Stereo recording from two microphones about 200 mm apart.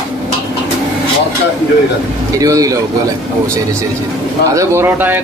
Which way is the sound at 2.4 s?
15° right (ahead or behind).